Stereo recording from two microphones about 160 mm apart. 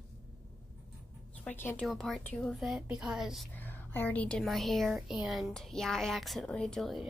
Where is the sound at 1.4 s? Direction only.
10° left (ahead or behind).